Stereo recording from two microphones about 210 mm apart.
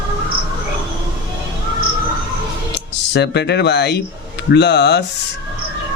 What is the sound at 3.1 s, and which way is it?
Speech, 55° left (ahead or behind).